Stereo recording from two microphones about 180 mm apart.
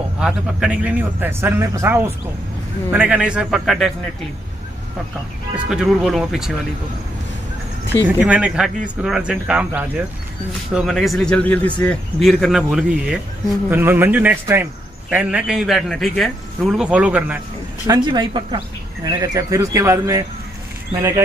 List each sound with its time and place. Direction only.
0.2 s a man's voice: 5° right (ahead or behind)
5.7 s speech: 5° right (ahead or behind)
8.2 s a man's voice: 5° right (ahead or behind)
17.8 s speech: 20° right (ahead or behind)